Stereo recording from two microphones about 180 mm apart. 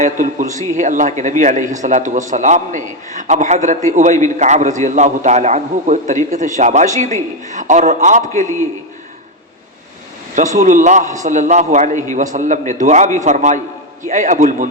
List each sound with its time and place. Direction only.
0.0 s a man's voice: 45° right (ahead or behind)
10.3 s a man's voice: 40° right (ahead or behind)